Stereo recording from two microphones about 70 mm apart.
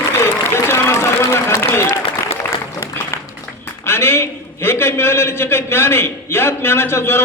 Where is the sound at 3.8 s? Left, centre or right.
Left.